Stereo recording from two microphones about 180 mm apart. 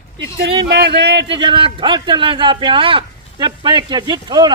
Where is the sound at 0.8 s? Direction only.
65° right (ahead or behind).